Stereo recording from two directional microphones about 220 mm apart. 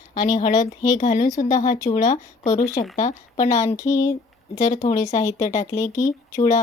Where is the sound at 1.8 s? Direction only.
15° left (ahead or behind).